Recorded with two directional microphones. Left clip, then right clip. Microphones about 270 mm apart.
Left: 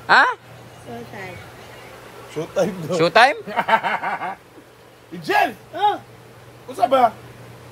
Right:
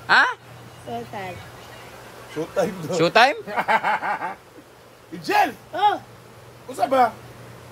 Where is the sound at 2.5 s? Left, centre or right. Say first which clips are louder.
Left 2 dB; left.